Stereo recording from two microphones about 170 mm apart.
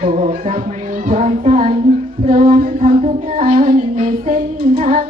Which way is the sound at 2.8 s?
35° right (ahead or behind).